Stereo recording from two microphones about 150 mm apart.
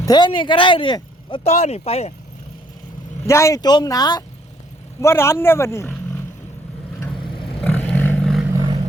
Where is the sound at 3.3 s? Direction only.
20° left (ahead or behind).